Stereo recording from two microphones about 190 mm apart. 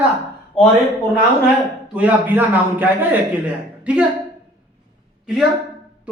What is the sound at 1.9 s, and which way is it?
A man's voice, 5° right (ahead or behind).